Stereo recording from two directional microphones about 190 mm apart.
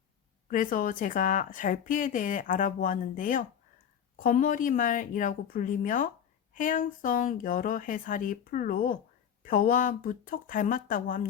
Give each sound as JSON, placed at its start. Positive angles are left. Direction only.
{"t": 0.5, "sound": "a woman's voice", "side_deg": 45}